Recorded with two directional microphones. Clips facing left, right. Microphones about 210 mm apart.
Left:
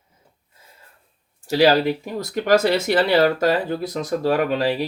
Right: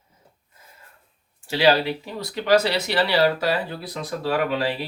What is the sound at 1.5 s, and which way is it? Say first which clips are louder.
Speech: left 3 dB; 45° left (ahead or behind).